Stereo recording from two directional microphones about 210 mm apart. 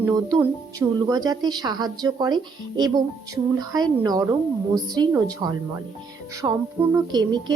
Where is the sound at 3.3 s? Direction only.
20° right (ahead or behind).